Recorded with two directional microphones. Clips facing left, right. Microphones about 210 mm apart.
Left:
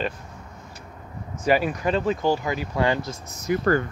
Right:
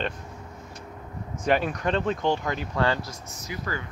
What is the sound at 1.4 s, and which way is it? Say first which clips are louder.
Speech: left 3 dB; 5° left (ahead or behind).